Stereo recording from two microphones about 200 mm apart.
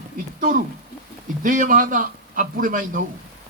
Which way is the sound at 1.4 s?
40° right (ahead or behind).